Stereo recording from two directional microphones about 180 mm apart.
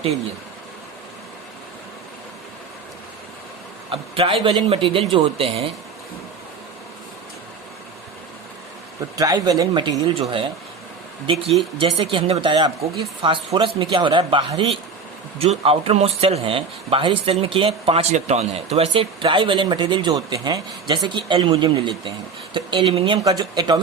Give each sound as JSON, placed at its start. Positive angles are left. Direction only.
{"t": 3.9, "sound": "a man's voice", "side_deg": -30}
{"t": 9.1, "sound": "speech", "side_deg": -20}
{"t": 11.8, "sound": "speech", "side_deg": -30}